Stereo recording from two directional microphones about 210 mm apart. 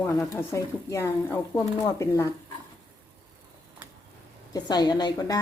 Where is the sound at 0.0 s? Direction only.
10° left (ahead or behind).